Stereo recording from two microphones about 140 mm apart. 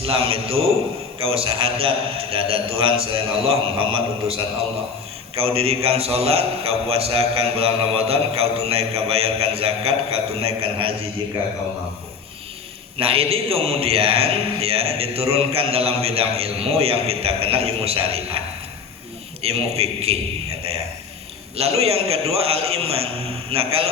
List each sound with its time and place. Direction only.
0.0 s a man's voice: 45° right (ahead or behind)
13.0 s a man's voice: 45° right (ahead or behind)